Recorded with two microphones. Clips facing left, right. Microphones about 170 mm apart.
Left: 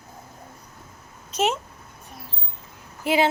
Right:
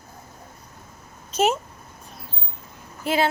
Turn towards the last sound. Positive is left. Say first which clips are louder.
# left 1 dB
turn(degrees=15)  # may be behind; listen again after turning